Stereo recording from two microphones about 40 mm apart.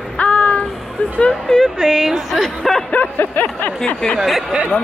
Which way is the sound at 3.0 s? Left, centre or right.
Left.